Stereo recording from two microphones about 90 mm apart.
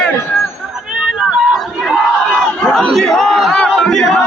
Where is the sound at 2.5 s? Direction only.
10° left (ahead or behind).